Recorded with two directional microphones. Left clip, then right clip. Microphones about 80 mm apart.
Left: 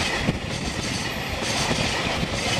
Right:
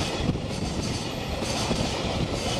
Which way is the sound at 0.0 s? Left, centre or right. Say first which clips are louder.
Left 4 dB; left.